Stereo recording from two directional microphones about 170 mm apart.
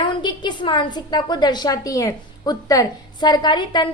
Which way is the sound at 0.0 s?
30° left (ahead or behind).